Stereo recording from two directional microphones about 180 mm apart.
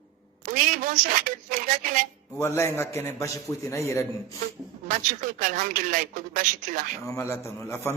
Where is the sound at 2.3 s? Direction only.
15° left (ahead or behind).